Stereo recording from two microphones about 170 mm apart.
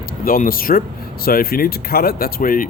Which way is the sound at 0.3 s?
55° left (ahead or behind).